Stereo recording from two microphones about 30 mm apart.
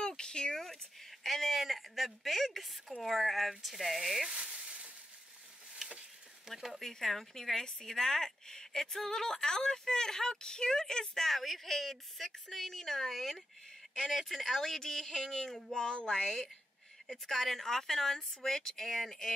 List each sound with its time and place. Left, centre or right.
0.0 s a sound: left
1.2 s speech: centre
4.3 s frying: right
5.8 s a sound: centre
6.5 s speech: centre
6.8 s a woman's voice: centre
11.1 s speech: centre
13.1 s speech: centre
13.9 s speech: centre
15.7 s a woman's voice: left
17.1 s speech: centre